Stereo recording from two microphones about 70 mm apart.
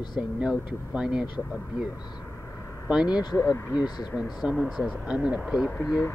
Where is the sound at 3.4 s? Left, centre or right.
Left.